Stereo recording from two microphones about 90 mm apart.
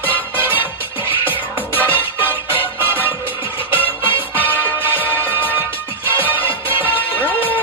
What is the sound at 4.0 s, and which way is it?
Music, 25° right (ahead or behind).